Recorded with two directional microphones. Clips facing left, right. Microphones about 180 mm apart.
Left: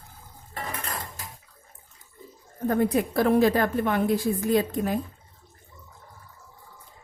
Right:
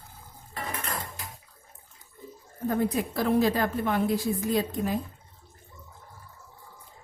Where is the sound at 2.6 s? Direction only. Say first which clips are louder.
Left 4 dB; 55° left (ahead or behind).